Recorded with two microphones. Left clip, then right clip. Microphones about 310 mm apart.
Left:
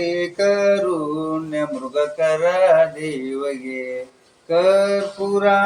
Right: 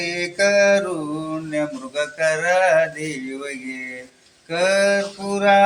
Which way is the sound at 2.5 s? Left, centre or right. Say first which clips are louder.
Left 1 dB; right.